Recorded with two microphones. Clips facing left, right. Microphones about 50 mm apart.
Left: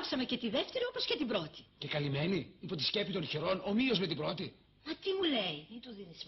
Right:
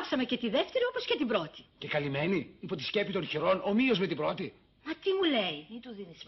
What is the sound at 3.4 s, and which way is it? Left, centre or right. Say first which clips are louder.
A woman's voice: right 6 dB; right.